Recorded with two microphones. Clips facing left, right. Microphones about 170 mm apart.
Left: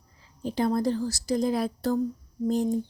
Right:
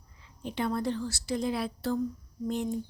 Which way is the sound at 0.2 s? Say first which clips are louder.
Left 5 dB; 35° left (ahead or behind).